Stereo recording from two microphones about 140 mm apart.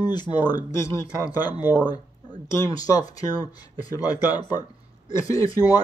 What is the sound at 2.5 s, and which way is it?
Speech, 25° left (ahead or behind).